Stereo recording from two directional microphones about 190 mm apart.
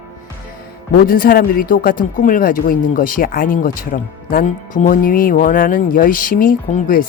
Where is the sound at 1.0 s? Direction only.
50° left (ahead or behind).